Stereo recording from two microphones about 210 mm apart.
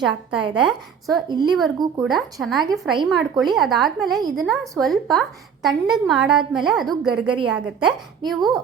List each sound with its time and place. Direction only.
0.0 s a woman's voice: centre (ahead or behind)
1.3 s a woman's voice: 20° right (ahead or behind)
2.0 s a woman's voice: centre (ahead or behind)